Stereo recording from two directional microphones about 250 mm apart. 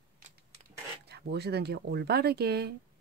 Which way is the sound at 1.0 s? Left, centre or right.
Right.